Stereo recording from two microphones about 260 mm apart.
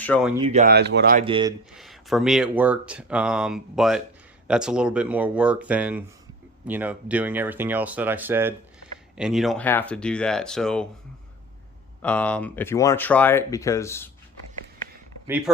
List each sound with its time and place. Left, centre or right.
0.1 s speech: centre
0.4 s speech: right
0.7 s speech: right
1.2 s speech: centre
1.7 s speech: centre
12.0 s speech: centre
15.5 s speech: centre